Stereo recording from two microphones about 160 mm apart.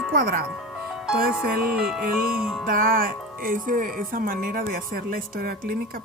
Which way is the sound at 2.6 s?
65° right (ahead or behind).